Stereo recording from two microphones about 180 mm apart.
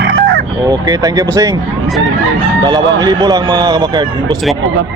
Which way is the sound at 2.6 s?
20° right (ahead or behind).